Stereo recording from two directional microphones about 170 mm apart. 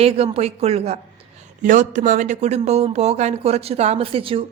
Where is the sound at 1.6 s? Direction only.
50° right (ahead or behind).